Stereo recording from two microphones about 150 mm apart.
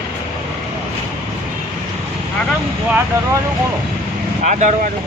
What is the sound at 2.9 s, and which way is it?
Vehicle, 15° right (ahead or behind).